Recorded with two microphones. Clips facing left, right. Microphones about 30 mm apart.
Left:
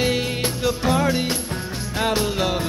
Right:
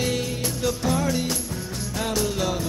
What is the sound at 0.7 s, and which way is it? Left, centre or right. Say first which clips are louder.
Music: left 4 dB; left.